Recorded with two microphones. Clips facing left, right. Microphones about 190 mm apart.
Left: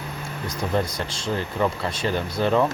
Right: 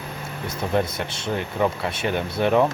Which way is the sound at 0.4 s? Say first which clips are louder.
Right 1 dB; 25° right (ahead or behind).